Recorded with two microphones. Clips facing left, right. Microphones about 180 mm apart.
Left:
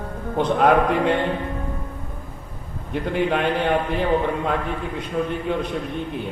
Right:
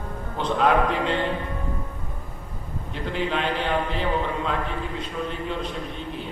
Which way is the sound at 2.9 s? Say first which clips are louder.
Left 5 dB; 55° left (ahead or behind).